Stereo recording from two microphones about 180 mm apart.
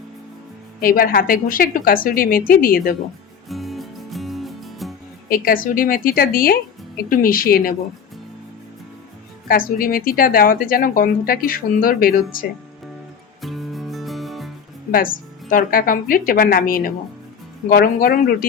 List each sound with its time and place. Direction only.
0.8 s speech: 55° left (ahead or behind)
3.5 s music: centre (ahead or behind)
5.3 s speech: 50° left (ahead or behind)
9.5 s speech: 50° left (ahead or behind)
13.4 s music: centre (ahead or behind)
14.9 s speech: 50° left (ahead or behind)